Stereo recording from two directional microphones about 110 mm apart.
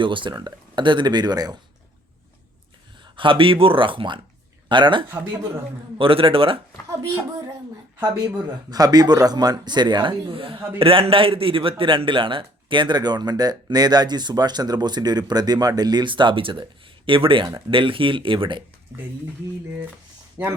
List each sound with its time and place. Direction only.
0.0 s a man's voice: 50° right (ahead or behind)
3.0 s speech: 50° right (ahead or behind)
7.9 s a man's voice: 30° right (ahead or behind); by 18.6 s 50° right (ahead or behind)